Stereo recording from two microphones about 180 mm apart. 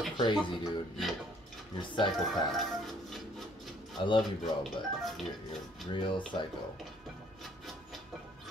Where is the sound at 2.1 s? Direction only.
Centre (ahead or behind).